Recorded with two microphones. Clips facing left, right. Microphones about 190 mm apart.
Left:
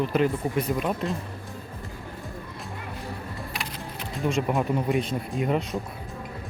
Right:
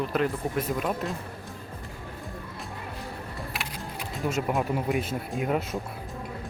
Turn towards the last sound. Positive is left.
turn(degrees=-5)  # may be behind; listen again after turning